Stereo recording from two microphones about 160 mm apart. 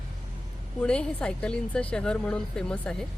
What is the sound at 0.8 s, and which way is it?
Speech, 5° left (ahead or behind).